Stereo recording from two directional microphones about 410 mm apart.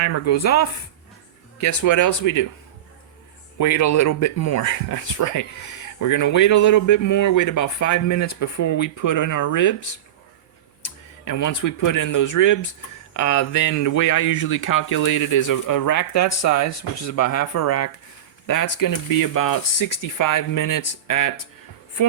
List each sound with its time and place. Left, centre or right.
0.0 s a woman's voice: left
3.6 s speech: left
10.8 s speech: left